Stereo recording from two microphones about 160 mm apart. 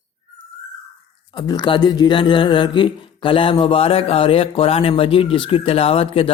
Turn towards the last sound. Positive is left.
turn(degrees=35)  # may be behind; listen again after turning